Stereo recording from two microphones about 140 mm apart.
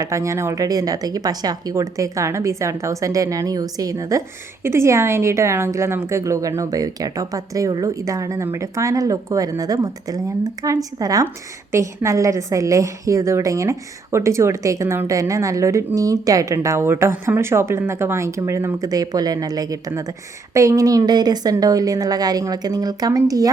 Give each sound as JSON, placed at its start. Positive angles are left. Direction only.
{"t": 0.0, "sound": "a woman's voice", "side_deg": -20}